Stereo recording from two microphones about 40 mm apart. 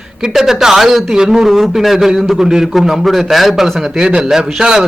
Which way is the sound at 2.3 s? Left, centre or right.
Centre.